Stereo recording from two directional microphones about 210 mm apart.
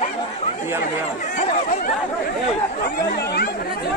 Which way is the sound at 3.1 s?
50° left (ahead or behind).